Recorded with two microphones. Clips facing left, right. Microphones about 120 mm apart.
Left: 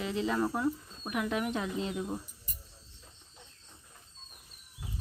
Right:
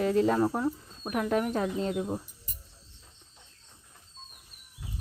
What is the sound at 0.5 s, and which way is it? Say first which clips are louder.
Speech: right 1 dB; 35° right (ahead or behind).